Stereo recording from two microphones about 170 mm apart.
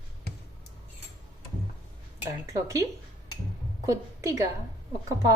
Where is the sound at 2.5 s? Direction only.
20° right (ahead or behind).